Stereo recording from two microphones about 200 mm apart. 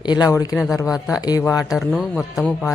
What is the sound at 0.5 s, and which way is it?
A man's voice, centre (ahead or behind).